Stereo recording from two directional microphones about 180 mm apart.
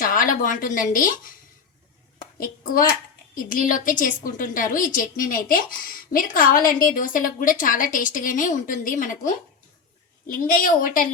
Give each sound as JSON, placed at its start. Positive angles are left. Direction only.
{"t": 0.0, "sound": "speech", "side_deg": 50}
{"t": 3.3, "sound": "a woman's voice", "side_deg": 50}